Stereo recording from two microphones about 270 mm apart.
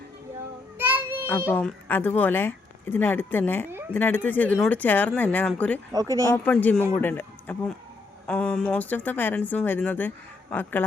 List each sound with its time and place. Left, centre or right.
0.8 s child singing: centre
1.5 s speech: centre
3.7 s a sound: centre
3.9 s speech: centre
5.9 s speech: centre
6.3 s speech: centre